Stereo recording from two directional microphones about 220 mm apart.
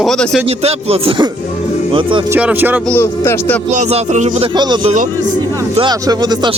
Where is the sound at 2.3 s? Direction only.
10° right (ahead or behind).